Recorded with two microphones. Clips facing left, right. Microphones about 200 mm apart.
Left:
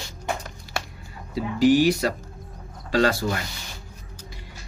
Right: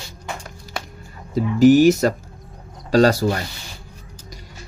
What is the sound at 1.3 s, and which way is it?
Speech, 45° right (ahead or behind).